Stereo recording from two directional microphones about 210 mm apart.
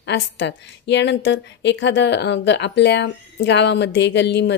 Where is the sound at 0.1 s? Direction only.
55° left (ahead or behind).